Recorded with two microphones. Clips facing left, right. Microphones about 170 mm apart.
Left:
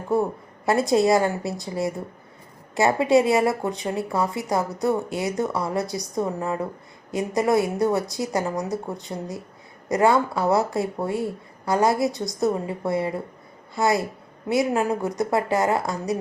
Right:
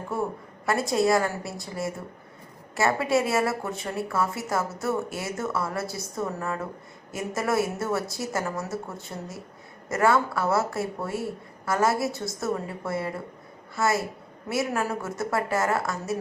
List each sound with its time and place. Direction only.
0.1 s a woman's voice: 20° left (ahead or behind)